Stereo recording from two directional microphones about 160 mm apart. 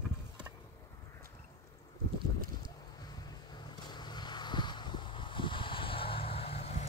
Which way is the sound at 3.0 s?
25° left (ahead or behind).